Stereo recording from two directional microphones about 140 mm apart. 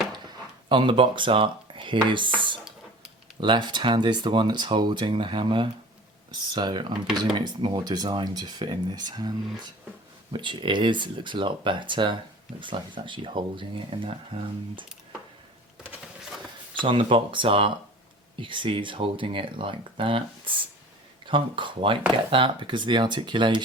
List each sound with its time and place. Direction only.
0.7 s speech: 35° right (ahead or behind)
10.3 s speech: 35° right (ahead or behind)
16.3 s a sound: centre (ahead or behind)
16.8 s speech: 35° right (ahead or behind)